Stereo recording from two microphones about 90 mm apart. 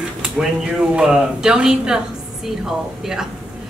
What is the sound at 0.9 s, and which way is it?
A man's voice, 5° right (ahead or behind).